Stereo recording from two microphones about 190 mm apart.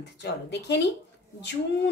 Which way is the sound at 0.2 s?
65° left (ahead or behind).